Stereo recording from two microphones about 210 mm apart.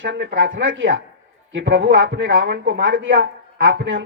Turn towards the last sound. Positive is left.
turn(degrees=-60)  # may be behind; listen again after turning